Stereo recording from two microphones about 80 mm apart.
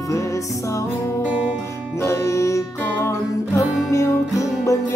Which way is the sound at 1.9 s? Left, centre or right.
Left.